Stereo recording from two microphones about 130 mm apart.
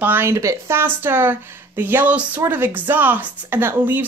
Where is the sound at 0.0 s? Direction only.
15° right (ahead or behind).